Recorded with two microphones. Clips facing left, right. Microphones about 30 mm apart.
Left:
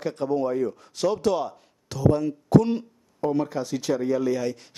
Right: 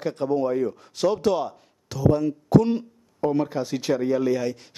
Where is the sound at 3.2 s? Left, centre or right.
Centre.